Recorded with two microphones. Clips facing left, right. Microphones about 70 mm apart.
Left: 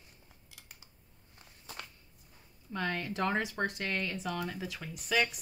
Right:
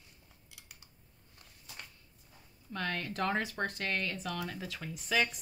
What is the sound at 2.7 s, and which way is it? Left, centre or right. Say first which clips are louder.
Speech: left 2 dB; centre.